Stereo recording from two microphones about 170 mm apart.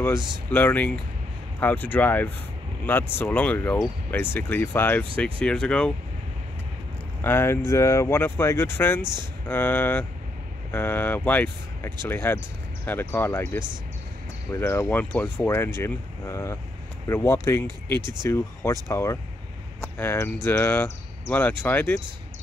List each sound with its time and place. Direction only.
0.5 s speech: 10° left (ahead or behind)
7.2 s speech: 15° left (ahead or behind)